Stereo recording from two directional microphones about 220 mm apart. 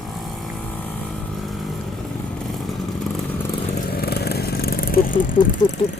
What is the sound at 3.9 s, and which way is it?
Vehicle, 45° left (ahead or behind).